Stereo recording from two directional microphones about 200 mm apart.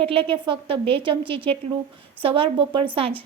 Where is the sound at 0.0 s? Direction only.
25° right (ahead or behind).